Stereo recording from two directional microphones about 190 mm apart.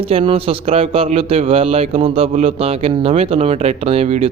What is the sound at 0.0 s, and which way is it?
A man's voice, 30° right (ahead or behind).